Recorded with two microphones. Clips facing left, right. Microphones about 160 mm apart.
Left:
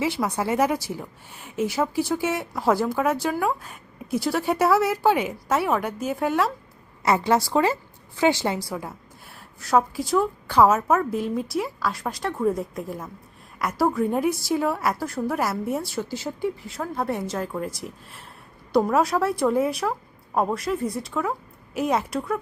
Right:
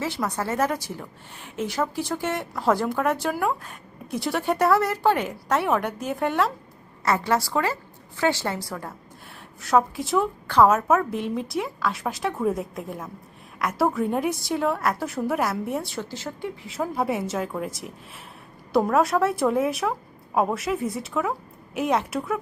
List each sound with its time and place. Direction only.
0.0 s a woman's voice: 10° left (ahead or behind)
7.0 s a woman's voice: 20° left (ahead or behind)
9.6 s a woman's voice: centre (ahead or behind)
16.8 s a woman's voice: 10° right (ahead or behind)